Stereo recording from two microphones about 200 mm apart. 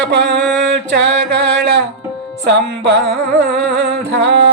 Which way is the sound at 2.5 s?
60° right (ahead or behind).